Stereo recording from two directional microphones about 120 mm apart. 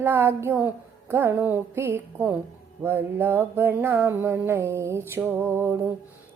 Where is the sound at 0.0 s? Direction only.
15° right (ahead or behind).